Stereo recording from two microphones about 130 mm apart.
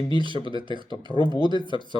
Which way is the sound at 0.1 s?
40° right (ahead or behind).